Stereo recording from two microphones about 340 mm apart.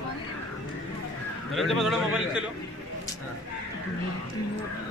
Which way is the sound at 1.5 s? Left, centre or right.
Centre.